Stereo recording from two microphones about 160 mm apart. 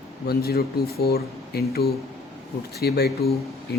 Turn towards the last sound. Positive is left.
turn(degrees=85)